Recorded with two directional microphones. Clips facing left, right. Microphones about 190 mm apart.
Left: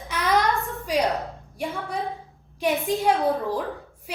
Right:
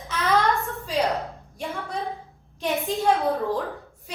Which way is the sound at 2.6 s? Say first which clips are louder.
Left 2 dB; 10° left (ahead or behind).